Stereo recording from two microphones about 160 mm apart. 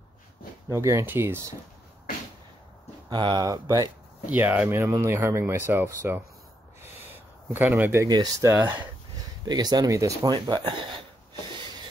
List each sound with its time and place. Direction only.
0.7 s speech: 20° right (ahead or behind)
3.1 s speech: 30° right (ahead or behind)
4.3 s speech: 10° right (ahead or behind)
8.5 s speech: 10° right (ahead or behind)
9.5 s speech: 25° right (ahead or behind)